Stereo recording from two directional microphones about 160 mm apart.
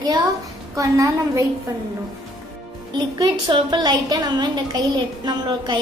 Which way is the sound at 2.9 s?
25° right (ahead or behind).